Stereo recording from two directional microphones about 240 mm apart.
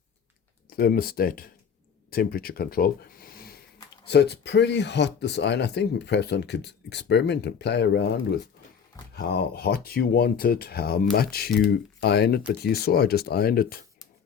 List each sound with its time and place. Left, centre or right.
0.7 s speech: left
9.1 s speech: left